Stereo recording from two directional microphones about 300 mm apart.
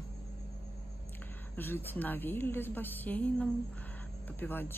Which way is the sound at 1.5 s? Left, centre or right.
Centre.